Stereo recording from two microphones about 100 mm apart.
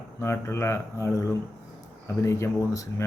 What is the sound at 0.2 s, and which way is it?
A man's voice, 25° left (ahead or behind).